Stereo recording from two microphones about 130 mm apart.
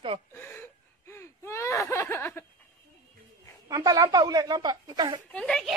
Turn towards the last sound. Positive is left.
turn(degrees=5)  # may be behind; listen again after turning